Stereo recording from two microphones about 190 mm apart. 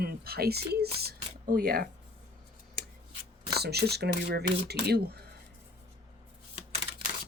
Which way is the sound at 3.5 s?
60° right (ahead or behind).